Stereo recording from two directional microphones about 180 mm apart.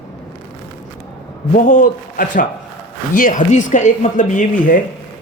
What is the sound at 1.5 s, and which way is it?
A man's voice, 45° left (ahead or behind).